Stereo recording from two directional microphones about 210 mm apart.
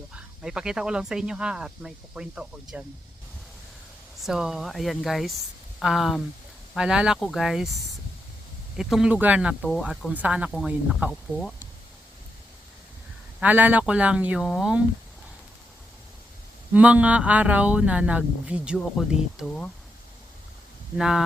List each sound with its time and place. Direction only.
0.4 s speech: 5° right (ahead or behind)
4.2 s speech: centre (ahead or behind)
8.7 s speech: centre (ahead or behind)
9.6 s speech: 5° left (ahead or behind)
10.2 s speech: 5° right (ahead or behind)
13.4 s speech: 10° right (ahead or behind)
16.7 s speech: 5° right (ahead or behind)